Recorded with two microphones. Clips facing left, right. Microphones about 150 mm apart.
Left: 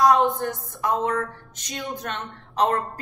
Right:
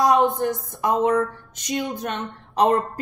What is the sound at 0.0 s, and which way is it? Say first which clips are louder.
A woman's voice: right 1 dB; 20° right (ahead or behind).